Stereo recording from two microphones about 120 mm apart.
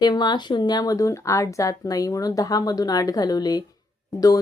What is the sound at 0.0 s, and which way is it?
Speech, 35° left (ahead or behind).